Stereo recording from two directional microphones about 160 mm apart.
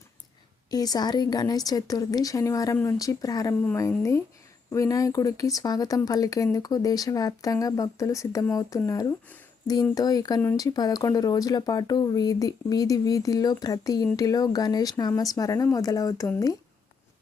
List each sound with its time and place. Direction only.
0.7 s speech: 25° left (ahead or behind)